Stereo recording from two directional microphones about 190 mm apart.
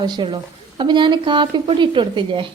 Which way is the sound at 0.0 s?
25° right (ahead or behind).